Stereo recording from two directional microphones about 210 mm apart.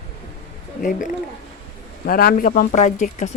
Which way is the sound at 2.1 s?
45° left (ahead or behind).